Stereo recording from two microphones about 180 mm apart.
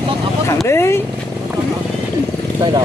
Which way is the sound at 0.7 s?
15° left (ahead or behind).